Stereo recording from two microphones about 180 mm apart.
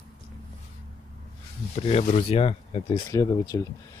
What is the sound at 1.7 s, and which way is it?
Speech, 35° left (ahead or behind).